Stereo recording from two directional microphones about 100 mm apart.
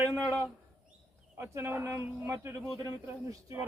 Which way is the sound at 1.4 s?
20° right (ahead or behind).